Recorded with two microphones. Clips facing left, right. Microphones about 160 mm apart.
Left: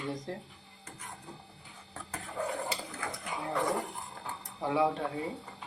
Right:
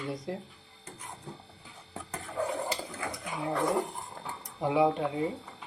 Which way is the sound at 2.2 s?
Centre (ahead or behind).